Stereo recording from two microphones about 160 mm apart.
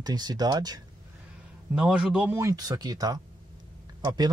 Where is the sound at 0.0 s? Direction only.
25° right (ahead or behind).